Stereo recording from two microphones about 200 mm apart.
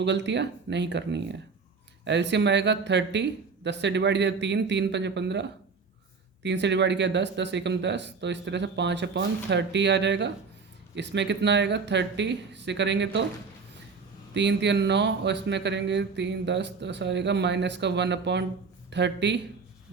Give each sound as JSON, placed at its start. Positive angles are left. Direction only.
{"t": 0.0, "sound": "speech", "side_deg": -60}
{"t": 14.3, "sound": "speech", "side_deg": -60}